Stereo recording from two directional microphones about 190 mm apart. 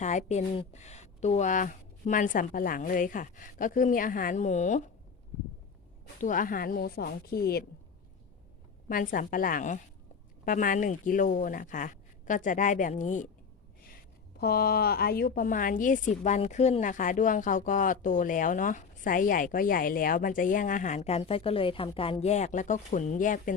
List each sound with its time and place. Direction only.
0.0 s a woman's voice: 35° left (ahead or behind)
6.1 s a woman's voice: 45° left (ahead or behind)
8.9 s a woman's voice: 45° left (ahead or behind)
14.3 s a woman's voice: 55° left (ahead or behind)